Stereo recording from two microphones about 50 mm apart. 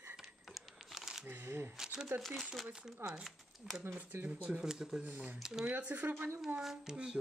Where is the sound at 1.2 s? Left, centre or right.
Right.